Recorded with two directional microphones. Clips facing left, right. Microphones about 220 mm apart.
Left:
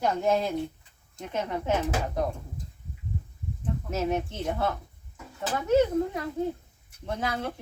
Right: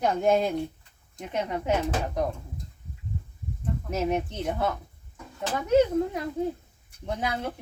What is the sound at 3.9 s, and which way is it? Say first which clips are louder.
Speech: right 1 dB; 15° right (ahead or behind).